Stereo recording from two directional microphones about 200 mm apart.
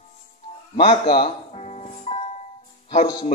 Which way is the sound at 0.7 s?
25° left (ahead or behind).